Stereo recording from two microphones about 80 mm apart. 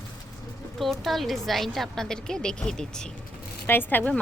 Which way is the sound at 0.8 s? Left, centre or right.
Centre.